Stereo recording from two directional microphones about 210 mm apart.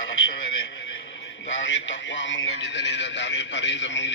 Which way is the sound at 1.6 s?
60° left (ahead or behind).